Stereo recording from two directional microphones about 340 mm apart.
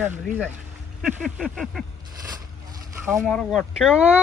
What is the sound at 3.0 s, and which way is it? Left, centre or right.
Speech, centre.